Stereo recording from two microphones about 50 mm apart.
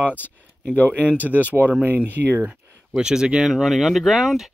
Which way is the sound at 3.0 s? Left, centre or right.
Centre.